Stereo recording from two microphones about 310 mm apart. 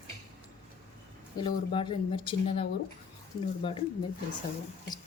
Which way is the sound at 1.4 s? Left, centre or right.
Centre.